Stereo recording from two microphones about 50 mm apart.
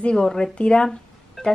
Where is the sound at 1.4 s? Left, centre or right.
Centre.